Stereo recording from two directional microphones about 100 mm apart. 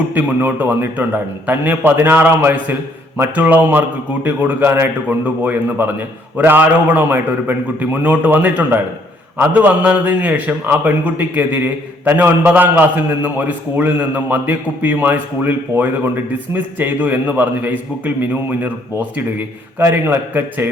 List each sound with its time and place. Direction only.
0.1 s a man's voice: 20° right (ahead or behind)